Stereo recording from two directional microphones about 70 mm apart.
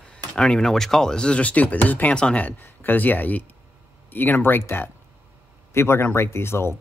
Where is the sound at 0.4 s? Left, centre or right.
Centre.